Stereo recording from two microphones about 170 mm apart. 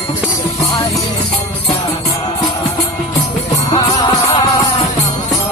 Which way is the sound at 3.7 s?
20° left (ahead or behind).